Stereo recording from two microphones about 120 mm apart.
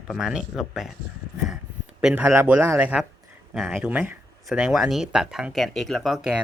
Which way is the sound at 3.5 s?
5° left (ahead or behind).